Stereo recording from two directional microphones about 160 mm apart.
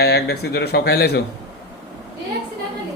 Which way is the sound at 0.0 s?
90° left.